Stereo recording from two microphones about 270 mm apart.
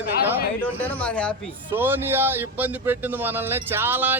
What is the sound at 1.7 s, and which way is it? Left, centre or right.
A man's voice, centre.